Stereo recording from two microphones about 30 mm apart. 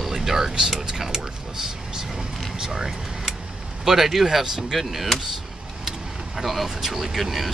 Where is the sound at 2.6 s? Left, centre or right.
Centre.